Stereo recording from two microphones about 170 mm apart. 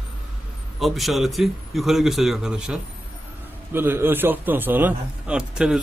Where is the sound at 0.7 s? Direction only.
Centre (ahead or behind).